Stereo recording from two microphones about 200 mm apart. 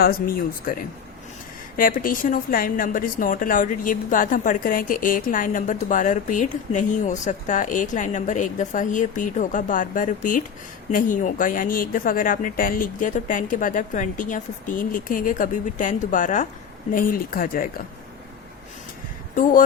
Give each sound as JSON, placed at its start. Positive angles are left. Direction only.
{"t": 0.0, "sound": "a woman's voice", "side_deg": 45}
{"t": 19.4, "sound": "speech", "side_deg": 40}